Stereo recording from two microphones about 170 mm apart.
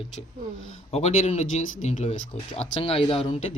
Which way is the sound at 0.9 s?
45° left (ahead or behind).